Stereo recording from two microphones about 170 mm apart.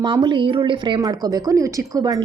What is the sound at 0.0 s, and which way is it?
A woman's voice, 25° right (ahead or behind).